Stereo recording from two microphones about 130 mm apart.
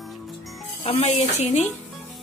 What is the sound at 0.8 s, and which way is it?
Speech, 55° left (ahead or behind).